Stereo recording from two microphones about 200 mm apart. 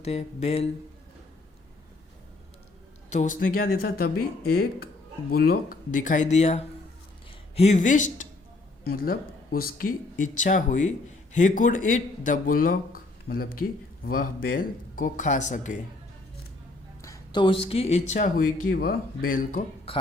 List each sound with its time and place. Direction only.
0.0 s speech: 30° left (ahead or behind)
3.1 s speech: 40° left (ahead or behind)
17.0 s a sound: 15° left (ahead or behind)
17.4 s speech: 25° left (ahead or behind); by 19.6 s 45° left (ahead or behind)